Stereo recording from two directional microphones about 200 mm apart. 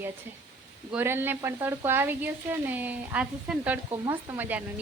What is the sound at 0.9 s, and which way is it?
Speech, 10° right (ahead or behind).